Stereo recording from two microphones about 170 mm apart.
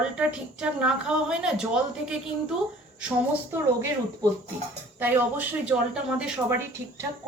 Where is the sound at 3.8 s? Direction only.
15° right (ahead or behind).